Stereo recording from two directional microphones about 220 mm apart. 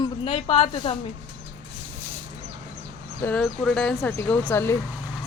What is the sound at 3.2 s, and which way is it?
A woman's voice, 5° left (ahead or behind).